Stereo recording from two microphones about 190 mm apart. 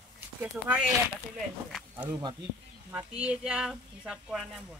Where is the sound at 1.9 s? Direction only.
10° right (ahead or behind).